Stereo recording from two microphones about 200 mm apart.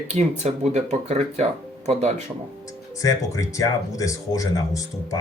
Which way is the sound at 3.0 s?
15° left (ahead or behind).